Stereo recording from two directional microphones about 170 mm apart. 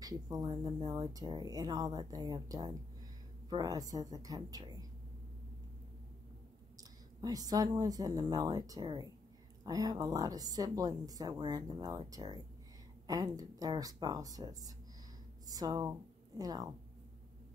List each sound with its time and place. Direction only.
0.0 s speech: 20° right (ahead or behind)
6.8 s a woman's voice: 20° right (ahead or behind)